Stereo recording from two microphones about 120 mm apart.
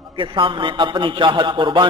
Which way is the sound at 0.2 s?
45° right (ahead or behind).